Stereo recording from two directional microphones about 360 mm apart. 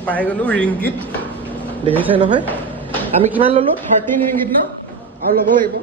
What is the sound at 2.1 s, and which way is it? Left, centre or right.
A woman's voice, centre.